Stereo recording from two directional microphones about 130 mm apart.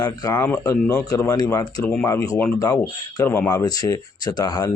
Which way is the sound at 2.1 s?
25° left (ahead or behind).